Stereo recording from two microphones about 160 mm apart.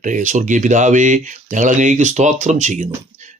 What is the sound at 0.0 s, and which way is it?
Speech, 50° right (ahead or behind).